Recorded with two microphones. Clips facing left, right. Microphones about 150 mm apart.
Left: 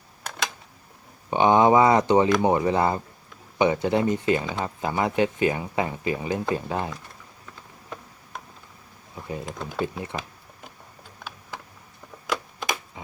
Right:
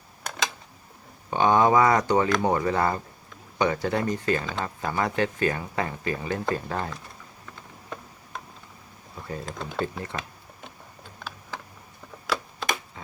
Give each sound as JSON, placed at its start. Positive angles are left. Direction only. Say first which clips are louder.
{"t": 1.3, "sound": "speech", "louder": "left 2 dB", "side_deg": 20}
{"t": 9.1, "sound": "speech", "louder": "left 2 dB", "side_deg": 15}